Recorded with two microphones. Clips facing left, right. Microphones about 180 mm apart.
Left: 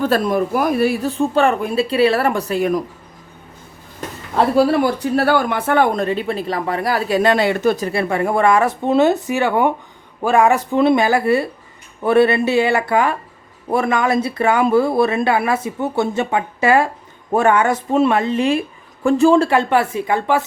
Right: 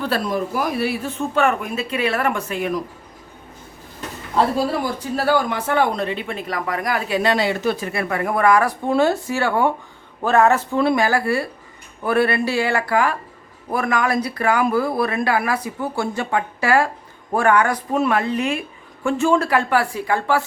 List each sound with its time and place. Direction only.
0.0 s speech: 50° left (ahead or behind)
4.5 s speech: 65° left (ahead or behind); by 20.4 s 20° left (ahead or behind)